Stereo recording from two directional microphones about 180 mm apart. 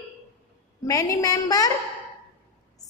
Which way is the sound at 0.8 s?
20° left (ahead or behind).